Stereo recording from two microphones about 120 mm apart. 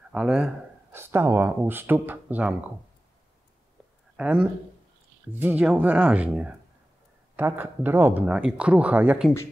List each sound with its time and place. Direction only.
0.1 s speech: 10° right (ahead or behind)
0.9 s speech: 20° right (ahead or behind)
4.2 s speech: 10° right (ahead or behind)